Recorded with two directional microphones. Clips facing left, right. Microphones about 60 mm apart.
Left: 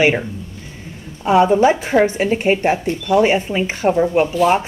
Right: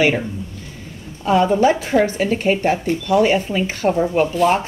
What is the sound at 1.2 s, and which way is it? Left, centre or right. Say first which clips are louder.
Speech: left 2 dB; centre.